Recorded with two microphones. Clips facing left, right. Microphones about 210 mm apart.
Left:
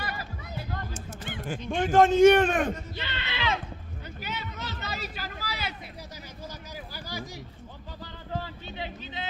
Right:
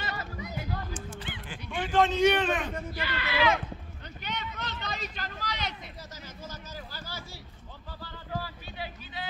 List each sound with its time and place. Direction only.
0.0 s music: 20° right (ahead or behind)
0.9 s a sound: 45° left (ahead or behind)
1.7 s a man's voice: 45° left (ahead or behind)
2.9 s music: 25° left (ahead or behind)
4.2 s a sound: 5° left (ahead or behind)
6.9 s speech: 15° left (ahead or behind)
8.0 s music: 20° left (ahead or behind)